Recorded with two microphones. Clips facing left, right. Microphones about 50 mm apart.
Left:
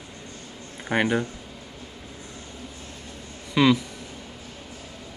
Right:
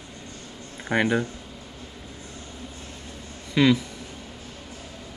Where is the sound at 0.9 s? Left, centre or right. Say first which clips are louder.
Even; centre.